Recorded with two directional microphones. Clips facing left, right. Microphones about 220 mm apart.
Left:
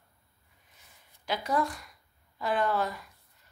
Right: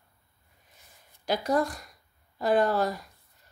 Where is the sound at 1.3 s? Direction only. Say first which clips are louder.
Right 4 dB; 40° right (ahead or behind).